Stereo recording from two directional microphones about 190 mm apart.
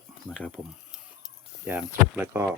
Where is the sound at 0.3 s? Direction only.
Centre (ahead or behind).